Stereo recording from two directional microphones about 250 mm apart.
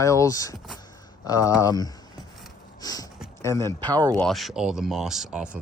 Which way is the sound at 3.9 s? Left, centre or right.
Centre.